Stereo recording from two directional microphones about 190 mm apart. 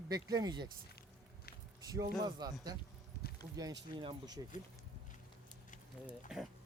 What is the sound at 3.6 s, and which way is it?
Speech, 25° right (ahead or behind).